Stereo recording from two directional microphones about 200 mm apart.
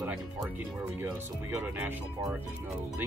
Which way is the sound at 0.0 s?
10° right (ahead or behind).